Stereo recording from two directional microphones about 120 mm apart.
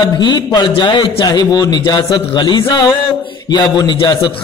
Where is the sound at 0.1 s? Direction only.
35° left (ahead or behind).